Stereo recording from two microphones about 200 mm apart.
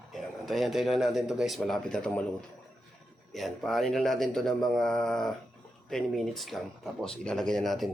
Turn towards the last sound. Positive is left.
turn(degrees=0)  # may be behind; listen again after turning